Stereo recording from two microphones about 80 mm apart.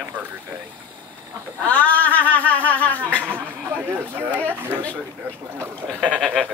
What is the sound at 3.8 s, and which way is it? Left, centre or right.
Speech, right.